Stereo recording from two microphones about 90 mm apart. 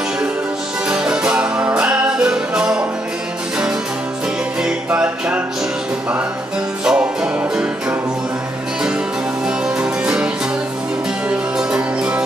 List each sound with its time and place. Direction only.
0.8 s music: 10° right (ahead or behind)
4.6 s music: 15° right (ahead or behind)
6.8 s music: 5° right (ahead or behind)
9.8 s music: 10° right (ahead or behind)